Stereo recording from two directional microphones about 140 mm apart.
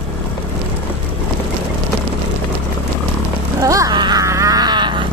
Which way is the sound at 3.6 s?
25° right (ahead or behind).